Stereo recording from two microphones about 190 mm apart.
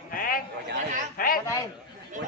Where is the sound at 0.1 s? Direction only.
45° left (ahead or behind).